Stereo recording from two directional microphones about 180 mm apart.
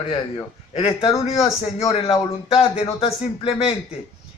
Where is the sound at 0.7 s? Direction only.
35° left (ahead or behind).